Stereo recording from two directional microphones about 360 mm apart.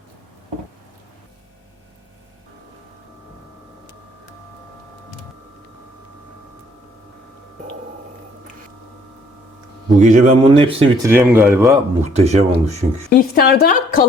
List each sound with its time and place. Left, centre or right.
10.0 s speech: right
13.1 s a woman's voice: left